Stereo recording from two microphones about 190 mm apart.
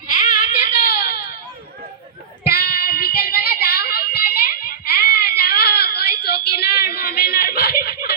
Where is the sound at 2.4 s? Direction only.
55° left (ahead or behind).